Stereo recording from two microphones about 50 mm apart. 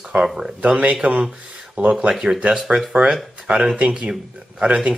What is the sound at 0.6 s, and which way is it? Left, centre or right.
Speech, right.